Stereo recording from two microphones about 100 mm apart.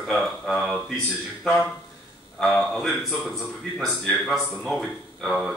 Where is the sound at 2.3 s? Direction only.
5° left (ahead or behind).